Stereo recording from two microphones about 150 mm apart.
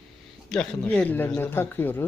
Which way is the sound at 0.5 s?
5° left (ahead or behind).